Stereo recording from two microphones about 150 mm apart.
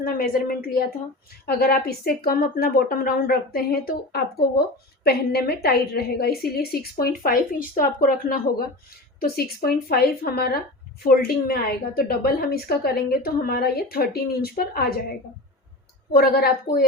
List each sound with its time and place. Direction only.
0.0 s a woman's voice: 70° left (ahead or behind)
1.5 s a woman's voice: 90° left
16.1 s a woman's voice: 90° left